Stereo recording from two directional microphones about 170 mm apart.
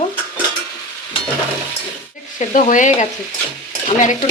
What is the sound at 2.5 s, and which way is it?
Speech, 50° left (ahead or behind).